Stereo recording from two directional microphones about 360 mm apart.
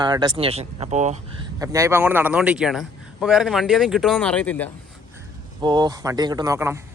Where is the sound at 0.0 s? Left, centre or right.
Centre.